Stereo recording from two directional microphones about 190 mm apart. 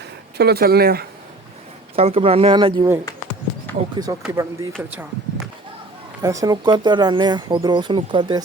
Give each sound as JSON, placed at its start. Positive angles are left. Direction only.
{"t": 0.3, "sound": "speech", "side_deg": -55}
{"t": 2.0, "sound": "speech", "side_deg": -30}
{"t": 3.9, "sound": "speech", "side_deg": -20}
{"t": 6.2, "sound": "speech", "side_deg": -20}